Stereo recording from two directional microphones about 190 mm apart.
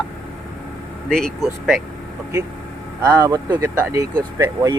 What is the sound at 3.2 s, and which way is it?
Speech, 20° right (ahead or behind).